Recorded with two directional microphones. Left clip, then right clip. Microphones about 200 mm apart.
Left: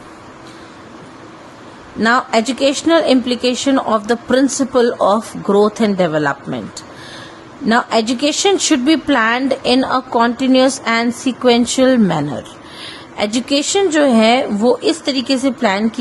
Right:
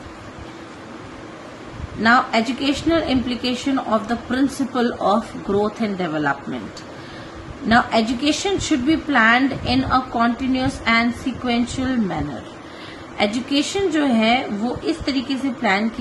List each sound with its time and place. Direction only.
2.0 s a woman's voice: 45° left (ahead or behind)
7.7 s a woman's voice: 45° left (ahead or behind)
13.1 s a woman's voice: 50° left (ahead or behind)